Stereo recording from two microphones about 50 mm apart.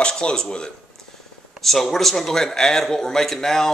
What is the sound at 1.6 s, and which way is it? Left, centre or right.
A man's voice, centre.